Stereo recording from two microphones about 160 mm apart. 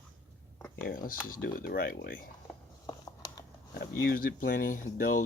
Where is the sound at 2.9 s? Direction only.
25° left (ahead or behind).